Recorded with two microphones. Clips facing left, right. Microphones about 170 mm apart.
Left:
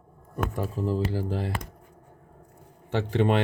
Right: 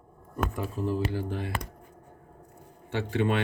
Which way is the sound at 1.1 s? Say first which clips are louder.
Left 3 dB; 35° left (ahead or behind).